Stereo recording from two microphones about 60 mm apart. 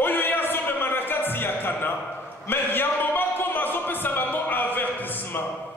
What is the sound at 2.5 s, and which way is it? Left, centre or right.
Music, left.